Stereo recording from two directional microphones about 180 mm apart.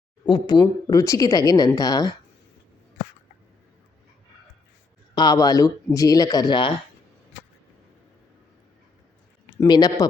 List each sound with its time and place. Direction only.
0.3 s speech: 25° left (ahead or behind)
5.1 s speech: 20° left (ahead or behind)
9.6 s speech: 20° left (ahead or behind)